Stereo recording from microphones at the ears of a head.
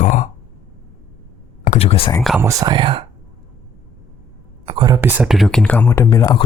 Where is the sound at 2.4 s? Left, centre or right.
Right.